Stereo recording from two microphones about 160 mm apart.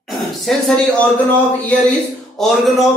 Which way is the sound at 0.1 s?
Centre (ahead or behind).